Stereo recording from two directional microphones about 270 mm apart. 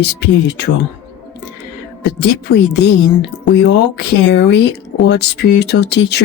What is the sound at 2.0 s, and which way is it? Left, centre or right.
Speech, left.